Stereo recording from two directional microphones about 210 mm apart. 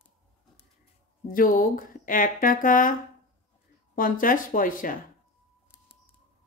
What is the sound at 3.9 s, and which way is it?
Speech, 40° left (ahead or behind).